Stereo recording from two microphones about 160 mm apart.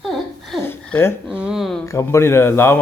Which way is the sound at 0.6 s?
15° left (ahead or behind).